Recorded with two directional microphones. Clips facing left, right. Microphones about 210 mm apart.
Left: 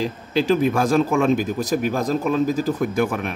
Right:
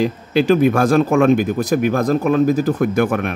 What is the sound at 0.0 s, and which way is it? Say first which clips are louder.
Speech: right 5 dB; 65° right (ahead or behind).